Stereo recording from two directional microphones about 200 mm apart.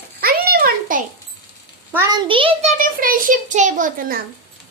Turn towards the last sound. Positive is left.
turn(degrees=-40)  # may be behind; listen again after turning